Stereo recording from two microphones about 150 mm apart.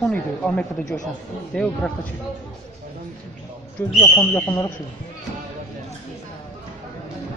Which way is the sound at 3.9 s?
15° left (ahead or behind).